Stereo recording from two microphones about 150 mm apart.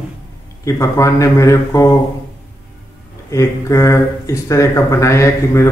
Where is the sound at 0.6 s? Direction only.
20° left (ahead or behind).